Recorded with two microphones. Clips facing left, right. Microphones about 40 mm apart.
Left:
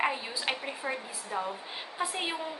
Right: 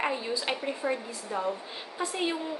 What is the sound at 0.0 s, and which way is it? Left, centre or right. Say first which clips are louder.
A woman's voice: right 1 dB; centre.